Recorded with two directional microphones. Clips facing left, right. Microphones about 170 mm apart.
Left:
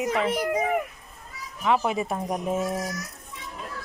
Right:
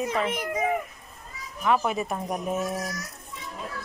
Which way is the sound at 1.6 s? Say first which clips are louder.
Left 1 dB; 20° left (ahead or behind).